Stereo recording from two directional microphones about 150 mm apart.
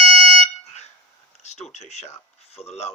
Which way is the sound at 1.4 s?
50° left (ahead or behind).